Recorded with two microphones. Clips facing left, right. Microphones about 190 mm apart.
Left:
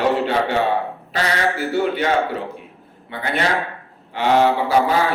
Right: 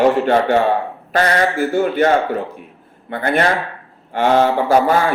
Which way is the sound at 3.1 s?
50° right (ahead or behind).